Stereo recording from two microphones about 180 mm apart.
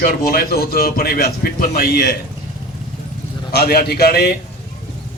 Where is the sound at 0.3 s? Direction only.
60° left (ahead or behind).